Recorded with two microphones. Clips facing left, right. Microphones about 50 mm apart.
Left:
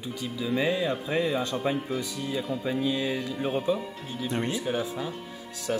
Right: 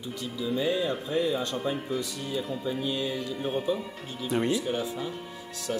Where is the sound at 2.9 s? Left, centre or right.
Left.